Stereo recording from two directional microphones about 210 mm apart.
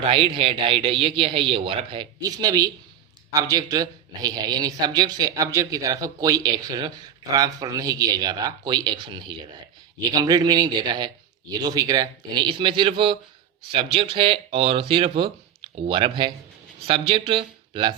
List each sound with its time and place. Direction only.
0.0 s a man's voice: 25° right (ahead or behind)